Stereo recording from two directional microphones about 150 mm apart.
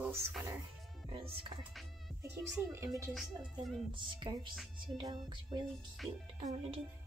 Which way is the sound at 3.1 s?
Centre (ahead or behind).